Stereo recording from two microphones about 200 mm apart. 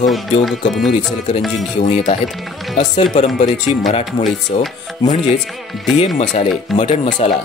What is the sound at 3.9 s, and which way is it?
Speech, 30° left (ahead or behind).